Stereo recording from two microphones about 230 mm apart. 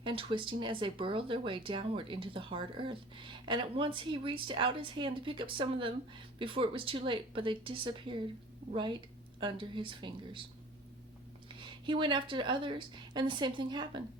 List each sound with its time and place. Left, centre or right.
0.0 s speech: right
11.4 s speech: right